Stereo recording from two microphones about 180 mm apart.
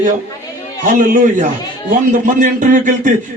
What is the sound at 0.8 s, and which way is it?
A man's voice, 45° right (ahead or behind).